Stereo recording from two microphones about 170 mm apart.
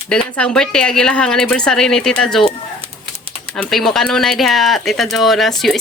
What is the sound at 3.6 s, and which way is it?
Speech, centre (ahead or behind).